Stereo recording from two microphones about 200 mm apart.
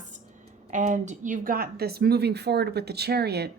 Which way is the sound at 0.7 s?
35° right (ahead or behind).